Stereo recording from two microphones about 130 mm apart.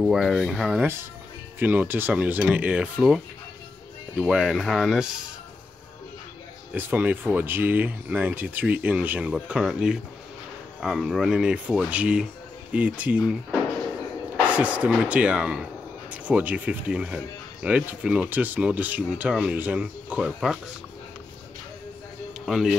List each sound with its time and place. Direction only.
0.0 s speech: centre (ahead or behind)
1.6 s speech: 15° right (ahead or behind)
4.2 s speech: 5° right (ahead or behind)
6.7 s speech: 15° right (ahead or behind)
22.5 s speech: centre (ahead or behind)